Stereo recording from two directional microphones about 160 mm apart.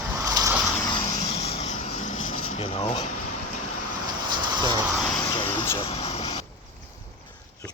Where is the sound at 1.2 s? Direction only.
40° left (ahead or behind).